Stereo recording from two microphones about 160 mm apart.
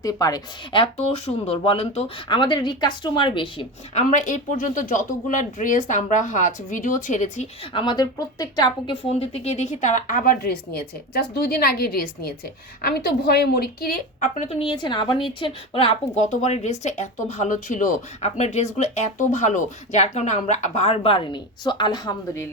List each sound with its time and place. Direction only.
0.0 s speech: 20° left (ahead or behind)
4.1 s speech: 50° left (ahead or behind)
7.7 s a woman's voice: 30° left (ahead or behind)
9.0 s a woman's voice: 40° left (ahead or behind); by 14.3 s 70° left (ahead or behind)
14.3 s speech: 40° left (ahead or behind)
16.1 s speech: 45° left (ahead or behind); by 22.4 s 25° left (ahead or behind)